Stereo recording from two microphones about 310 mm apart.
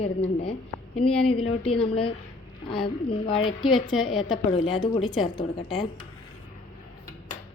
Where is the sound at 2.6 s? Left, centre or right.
Centre.